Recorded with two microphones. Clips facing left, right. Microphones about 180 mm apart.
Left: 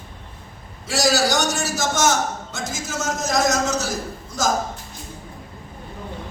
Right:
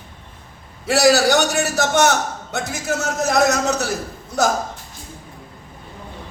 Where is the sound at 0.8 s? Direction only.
60° right (ahead or behind).